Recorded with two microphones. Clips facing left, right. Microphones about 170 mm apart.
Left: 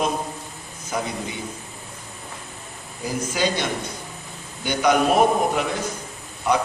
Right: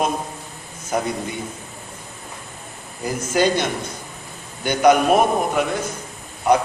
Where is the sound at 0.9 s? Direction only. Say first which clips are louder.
Right 4 dB; 50° right (ahead or behind).